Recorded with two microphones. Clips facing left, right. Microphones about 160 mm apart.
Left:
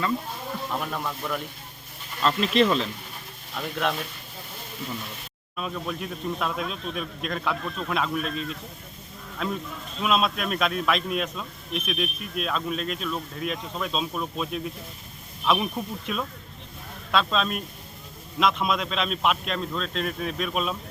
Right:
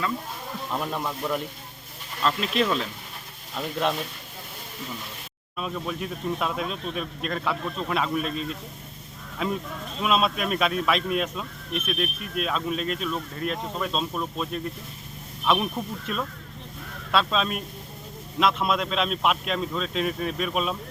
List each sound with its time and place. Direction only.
0.9 s speech: 15° right (ahead or behind)
2.2 s speech: centre (ahead or behind)
5.5 s speech: centre (ahead or behind)